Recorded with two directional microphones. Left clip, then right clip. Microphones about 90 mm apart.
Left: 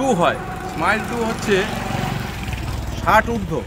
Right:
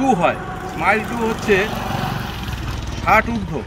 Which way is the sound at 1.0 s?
20° right (ahead or behind).